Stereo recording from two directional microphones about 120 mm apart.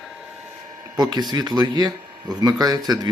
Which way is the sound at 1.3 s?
35° right (ahead or behind).